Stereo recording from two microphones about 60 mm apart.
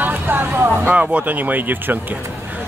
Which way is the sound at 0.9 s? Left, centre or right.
Right.